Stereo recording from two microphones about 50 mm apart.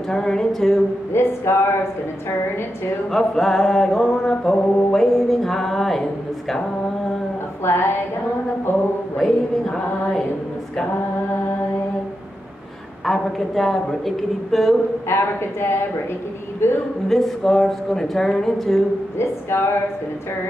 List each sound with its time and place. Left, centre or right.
0.1 s a woman's voice: centre
1.1 s speech: left
3.1 s a woman's voice: centre
7.6 s speech: left
9.2 s a woman's voice: centre
13.0 s a woman's voice: centre
15.0 s a woman's voice: left
17.1 s a woman's voice: centre
19.1 s speech: left